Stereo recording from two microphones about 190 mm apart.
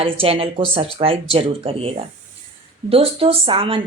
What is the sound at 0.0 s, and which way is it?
A woman's voice, 30° right (ahead or behind).